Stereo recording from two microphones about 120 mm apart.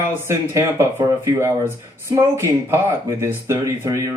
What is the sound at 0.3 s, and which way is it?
Speech, 25° right (ahead or behind).